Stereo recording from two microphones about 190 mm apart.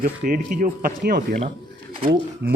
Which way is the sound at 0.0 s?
45° right (ahead or behind).